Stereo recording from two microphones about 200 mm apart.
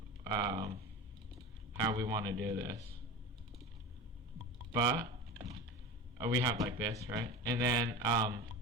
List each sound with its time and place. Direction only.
0.3 s speech: 20° right (ahead or behind)
4.7 s speech: 20° right (ahead or behind)
6.1 s speech: 20° right (ahead or behind)